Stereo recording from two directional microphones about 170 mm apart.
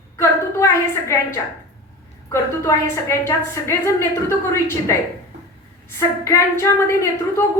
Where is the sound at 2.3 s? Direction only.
15° left (ahead or behind).